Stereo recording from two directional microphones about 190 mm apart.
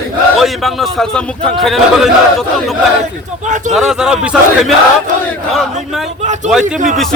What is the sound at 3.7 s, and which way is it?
A man's voice, centre (ahead or behind).